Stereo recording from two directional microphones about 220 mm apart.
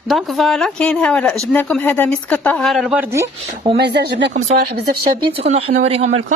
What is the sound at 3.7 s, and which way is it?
Speech, 50° right (ahead or behind).